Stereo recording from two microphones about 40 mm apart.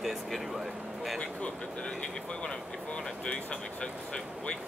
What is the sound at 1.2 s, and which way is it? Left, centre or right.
Vehicle, left.